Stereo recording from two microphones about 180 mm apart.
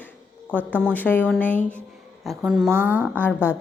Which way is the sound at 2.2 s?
5° right (ahead or behind).